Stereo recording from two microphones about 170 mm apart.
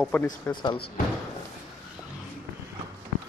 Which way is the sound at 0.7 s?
65° left (ahead or behind).